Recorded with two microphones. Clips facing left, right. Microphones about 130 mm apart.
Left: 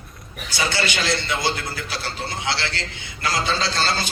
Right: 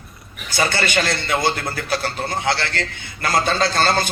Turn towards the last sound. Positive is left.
turn(degrees=-50)  # may be behind; listen again after turning